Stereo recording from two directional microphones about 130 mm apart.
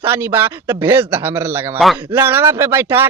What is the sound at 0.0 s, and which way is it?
Speech, 15° right (ahead or behind).